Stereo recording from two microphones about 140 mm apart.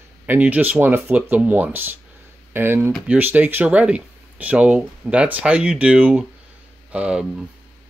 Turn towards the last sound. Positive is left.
turn(degrees=-5)  # may be behind; listen again after turning